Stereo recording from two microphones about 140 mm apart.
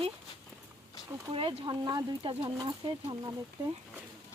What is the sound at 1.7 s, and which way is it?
Speech, 30° right (ahead or behind).